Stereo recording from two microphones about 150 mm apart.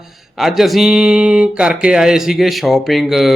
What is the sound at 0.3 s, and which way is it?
Speech, centre (ahead or behind).